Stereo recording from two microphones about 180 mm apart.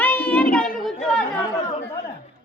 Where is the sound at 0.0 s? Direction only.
10° left (ahead or behind).